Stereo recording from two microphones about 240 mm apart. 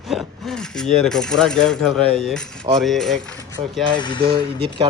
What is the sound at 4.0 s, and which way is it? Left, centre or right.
Speech, centre.